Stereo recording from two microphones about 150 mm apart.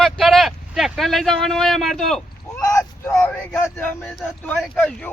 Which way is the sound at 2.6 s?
20° left (ahead or behind).